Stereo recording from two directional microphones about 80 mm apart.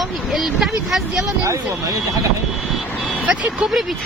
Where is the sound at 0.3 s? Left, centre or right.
Centre.